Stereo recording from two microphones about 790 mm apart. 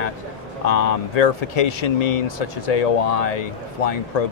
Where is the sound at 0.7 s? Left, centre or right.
Left.